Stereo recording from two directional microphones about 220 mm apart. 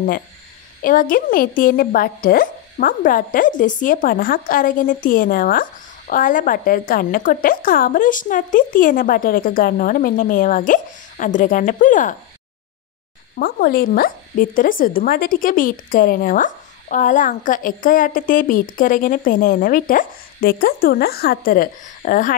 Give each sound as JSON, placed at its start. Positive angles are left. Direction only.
{"t": 0.8, "sound": "speech", "side_deg": 40}
{"t": 13.4, "sound": "speech", "side_deg": 45}